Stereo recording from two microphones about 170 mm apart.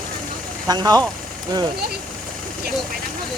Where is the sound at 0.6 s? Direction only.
25° right (ahead or behind).